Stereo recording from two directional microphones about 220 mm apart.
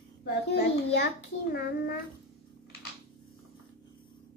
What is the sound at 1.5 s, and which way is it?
Speech, 45° left (ahead or behind).